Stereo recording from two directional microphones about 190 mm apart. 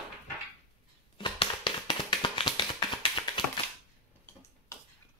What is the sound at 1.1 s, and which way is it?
Tap, 25° left (ahead or behind).